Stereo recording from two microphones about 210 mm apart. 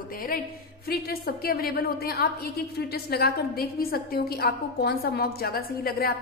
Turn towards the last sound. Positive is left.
turn(degrees=45)  # may be behind; listen again after turning